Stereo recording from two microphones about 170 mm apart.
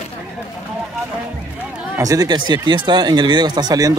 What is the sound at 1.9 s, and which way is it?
Speech, 20° right (ahead or behind).